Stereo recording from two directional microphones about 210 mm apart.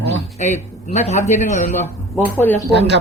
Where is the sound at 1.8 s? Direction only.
10° left (ahead or behind).